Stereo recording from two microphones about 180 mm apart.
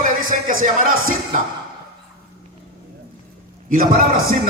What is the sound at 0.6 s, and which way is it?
Speech, 45° right (ahead or behind).